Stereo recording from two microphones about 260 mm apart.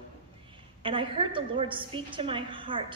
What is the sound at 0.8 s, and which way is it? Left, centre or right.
A woman's voice, centre.